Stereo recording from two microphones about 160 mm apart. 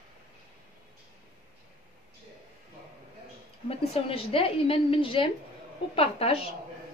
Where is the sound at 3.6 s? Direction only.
35° left (ahead or behind).